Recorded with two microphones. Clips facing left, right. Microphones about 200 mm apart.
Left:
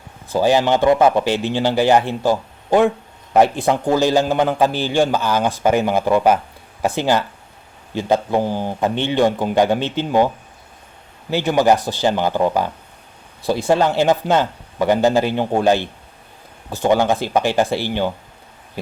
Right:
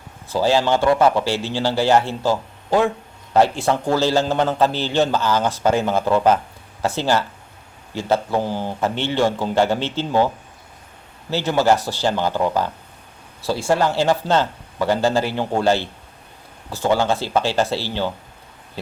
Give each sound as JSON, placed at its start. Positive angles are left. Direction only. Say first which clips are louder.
{"t": 0.3, "sound": "a man's voice", "louder": "left 2 dB", "side_deg": 15}